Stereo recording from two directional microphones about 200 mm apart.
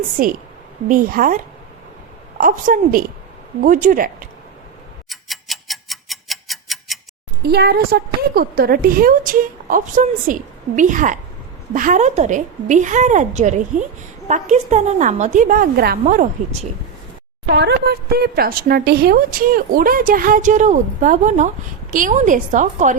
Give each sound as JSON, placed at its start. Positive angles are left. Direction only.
{"t": 0.2, "sound": "speech", "side_deg": -45}
{"t": 2.4, "sound": "a woman's voice", "side_deg": -40}
{"t": 5.0, "sound": "tick-tock", "side_deg": 0}
{"t": 7.4, "sound": "a woman's voice", "side_deg": -55}
{"t": 17.5, "sound": "speech", "side_deg": -55}